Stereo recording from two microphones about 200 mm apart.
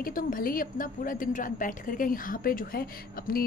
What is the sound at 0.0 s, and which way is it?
A woman's voice, 45° left (ahead or behind).